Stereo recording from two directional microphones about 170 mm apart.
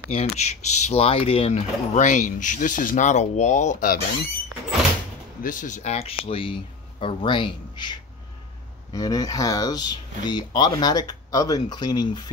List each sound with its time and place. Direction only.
0.1 s speech: 40° left (ahead or behind); by 4.3 s 55° left (ahead or behind)
5.4 s speech: 50° left (ahead or behind); by 12.3 s 25° left (ahead or behind)